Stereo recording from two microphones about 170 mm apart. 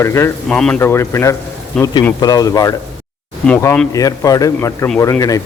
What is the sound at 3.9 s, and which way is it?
Speech, 20° left (ahead or behind).